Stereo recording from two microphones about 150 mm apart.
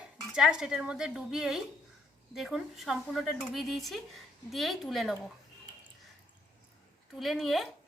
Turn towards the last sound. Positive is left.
turn(degrees=0)  # may be behind; listen again after turning